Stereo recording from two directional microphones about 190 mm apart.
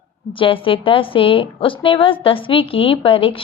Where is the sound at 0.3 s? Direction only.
25° left (ahead or behind).